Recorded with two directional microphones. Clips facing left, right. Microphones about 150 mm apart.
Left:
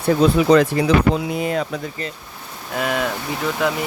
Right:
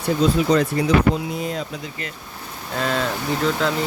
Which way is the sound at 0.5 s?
60° left (ahead or behind).